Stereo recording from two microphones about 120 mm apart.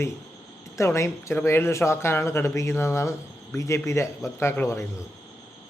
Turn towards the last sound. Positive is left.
turn(degrees=25)  # may be behind; listen again after turning